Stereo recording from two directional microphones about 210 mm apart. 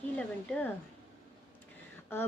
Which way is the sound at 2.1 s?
10° left (ahead or behind).